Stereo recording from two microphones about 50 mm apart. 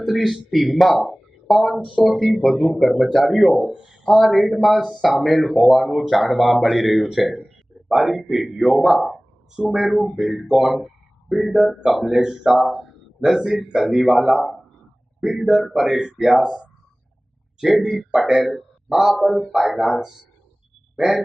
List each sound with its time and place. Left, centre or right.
0.0 s speech: centre
4.0 s speech: centre
7.4 s a sound: centre
8.5 s speech: centre
9.6 s speech: centre
9.8 s speech: centre